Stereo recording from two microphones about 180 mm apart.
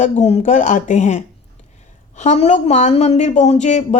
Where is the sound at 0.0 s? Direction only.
35° left (ahead or behind).